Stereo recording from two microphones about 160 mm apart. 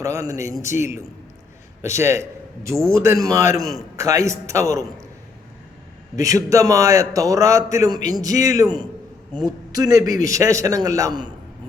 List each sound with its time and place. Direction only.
0.0 s a man's voice: 20° right (ahead or behind)
6.1 s a man's voice: 20° right (ahead or behind)